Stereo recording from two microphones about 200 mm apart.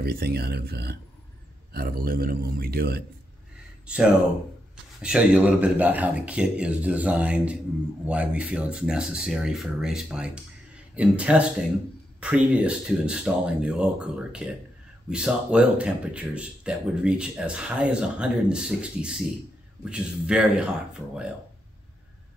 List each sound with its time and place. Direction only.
0.0 s a man's voice: 50° right (ahead or behind)
3.8 s speech: 5° right (ahead or behind)